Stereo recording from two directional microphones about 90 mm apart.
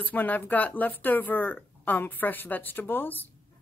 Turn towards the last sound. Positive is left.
turn(degrees=20)  # may be behind; listen again after turning